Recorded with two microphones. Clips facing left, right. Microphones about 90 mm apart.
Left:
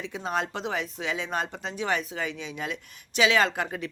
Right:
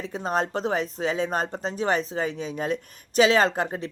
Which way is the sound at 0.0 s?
40° right (ahead or behind).